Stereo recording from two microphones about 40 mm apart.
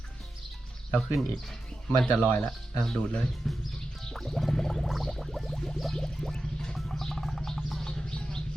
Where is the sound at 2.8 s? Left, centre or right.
Centre.